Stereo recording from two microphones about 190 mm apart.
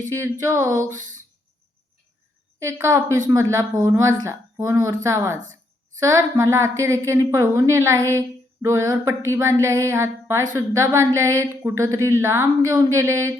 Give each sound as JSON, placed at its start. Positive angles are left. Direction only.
{"t": 0.1, "sound": "a woman's voice", "side_deg": -15}
{"t": 2.6, "sound": "a woman's voice", "side_deg": -15}